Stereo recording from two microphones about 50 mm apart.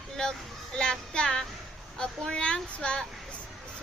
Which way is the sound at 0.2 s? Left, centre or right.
Centre.